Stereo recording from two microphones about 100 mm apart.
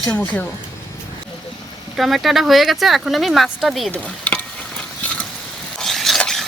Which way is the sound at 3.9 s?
15° left (ahead or behind).